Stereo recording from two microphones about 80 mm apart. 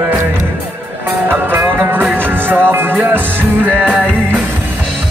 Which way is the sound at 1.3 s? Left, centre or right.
Right.